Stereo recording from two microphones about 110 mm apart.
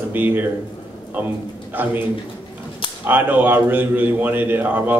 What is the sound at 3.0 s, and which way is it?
A man's voice, 15° right (ahead or behind).